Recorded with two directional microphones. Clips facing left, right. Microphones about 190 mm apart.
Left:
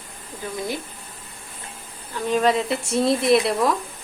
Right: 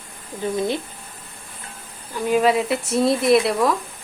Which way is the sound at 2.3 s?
10° right (ahead or behind).